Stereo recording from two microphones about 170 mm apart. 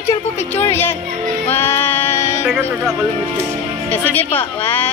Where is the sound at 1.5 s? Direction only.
15° left (ahead or behind).